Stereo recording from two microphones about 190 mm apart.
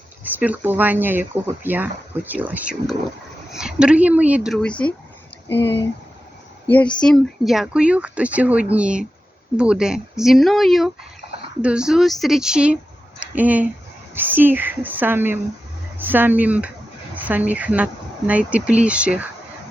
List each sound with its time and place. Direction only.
0.3 s speech: 10° right (ahead or behind); by 4.9 s 5° left (ahead or behind)
5.5 s speech: 65° left (ahead or behind)
6.7 s speech: 10° left (ahead or behind); by 19.3 s 5° right (ahead or behind)